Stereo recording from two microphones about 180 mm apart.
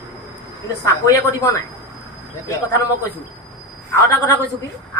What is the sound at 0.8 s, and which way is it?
Speech, 20° left (ahead or behind).